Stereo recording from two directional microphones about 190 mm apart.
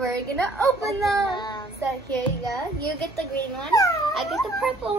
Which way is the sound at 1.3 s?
25° left (ahead or behind).